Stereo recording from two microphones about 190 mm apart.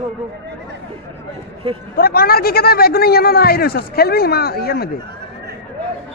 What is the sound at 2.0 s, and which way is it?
A man's voice, 50° left (ahead or behind).